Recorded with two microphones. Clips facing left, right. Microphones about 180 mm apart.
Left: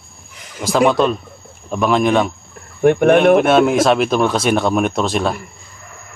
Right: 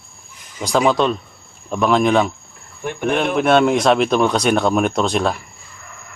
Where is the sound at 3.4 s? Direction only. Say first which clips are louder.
Left 2 dB; centre (ahead or behind).